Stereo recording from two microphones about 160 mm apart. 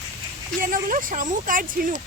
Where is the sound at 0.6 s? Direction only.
55° right (ahead or behind).